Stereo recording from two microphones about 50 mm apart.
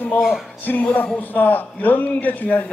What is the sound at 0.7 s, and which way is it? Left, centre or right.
A man's voice, left.